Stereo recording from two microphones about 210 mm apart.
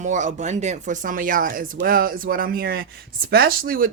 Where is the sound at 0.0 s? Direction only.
35° right (ahead or behind).